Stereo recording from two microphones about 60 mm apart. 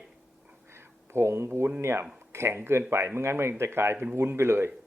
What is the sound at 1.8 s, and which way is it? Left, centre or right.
A man's voice, right.